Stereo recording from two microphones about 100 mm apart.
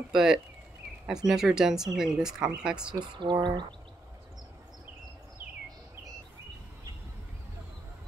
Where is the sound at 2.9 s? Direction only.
50° right (ahead or behind).